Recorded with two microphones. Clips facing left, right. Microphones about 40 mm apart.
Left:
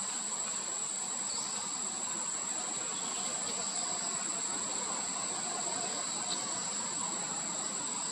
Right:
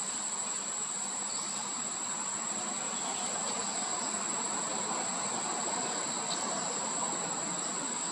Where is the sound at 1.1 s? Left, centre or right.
Centre.